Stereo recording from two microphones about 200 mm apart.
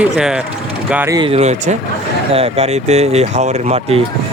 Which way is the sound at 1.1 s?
25° right (ahead or behind).